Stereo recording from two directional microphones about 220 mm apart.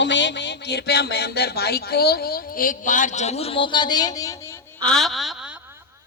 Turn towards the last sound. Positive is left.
turn(degrees=0)  # may be behind; listen again after turning